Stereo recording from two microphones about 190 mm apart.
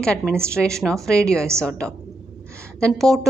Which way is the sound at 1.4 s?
15° right (ahead or behind).